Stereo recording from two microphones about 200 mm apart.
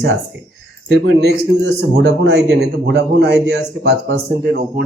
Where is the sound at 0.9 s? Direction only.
60° right (ahead or behind).